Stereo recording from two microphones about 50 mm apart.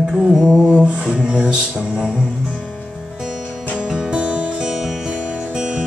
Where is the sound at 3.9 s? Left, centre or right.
Centre.